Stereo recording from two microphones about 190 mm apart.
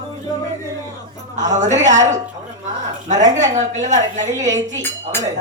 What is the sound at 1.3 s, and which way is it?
A woman's voice, 40° right (ahead or behind).